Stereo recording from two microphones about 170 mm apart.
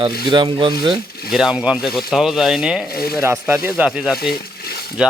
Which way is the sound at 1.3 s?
5° right (ahead or behind).